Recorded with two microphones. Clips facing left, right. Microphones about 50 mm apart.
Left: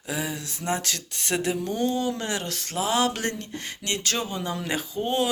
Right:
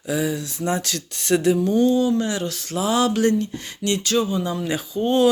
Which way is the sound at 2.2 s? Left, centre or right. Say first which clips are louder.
Right 6 dB; left.